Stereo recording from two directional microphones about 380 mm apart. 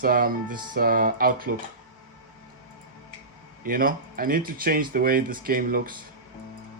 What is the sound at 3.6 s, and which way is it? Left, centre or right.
A man's voice, right.